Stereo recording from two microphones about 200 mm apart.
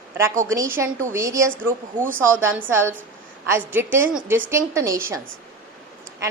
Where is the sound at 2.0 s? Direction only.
40° right (ahead or behind).